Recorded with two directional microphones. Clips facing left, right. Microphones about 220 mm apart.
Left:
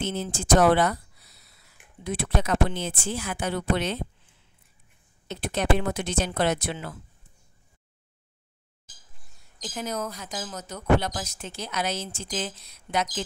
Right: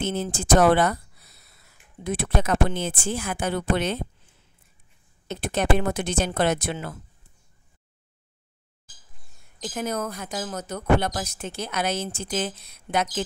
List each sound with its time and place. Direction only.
0.0 s speech: 50° right (ahead or behind)
2.0 s speech: 50° right (ahead or behind)
9.8 s speech: 55° right (ahead or behind)